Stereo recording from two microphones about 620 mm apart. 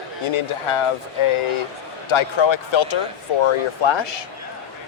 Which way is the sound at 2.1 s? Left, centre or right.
Left.